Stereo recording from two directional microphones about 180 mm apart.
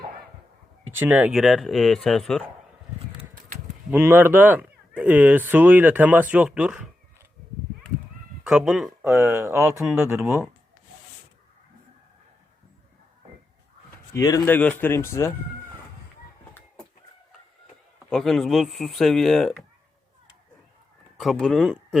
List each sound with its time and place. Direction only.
0.9 s speech: 10° right (ahead or behind)
3.9 s speech: 10° right (ahead or behind)
8.4 s speech: centre (ahead or behind)
9.1 s speech: 15° right (ahead or behind)
14.1 s speech: 15° left (ahead or behind)
18.1 s speech: centre (ahead or behind)
21.2 s speech: centre (ahead or behind)